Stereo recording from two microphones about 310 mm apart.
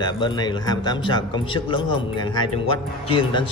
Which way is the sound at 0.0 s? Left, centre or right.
Centre.